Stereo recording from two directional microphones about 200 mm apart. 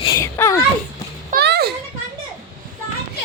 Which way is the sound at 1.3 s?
55° right (ahead or behind).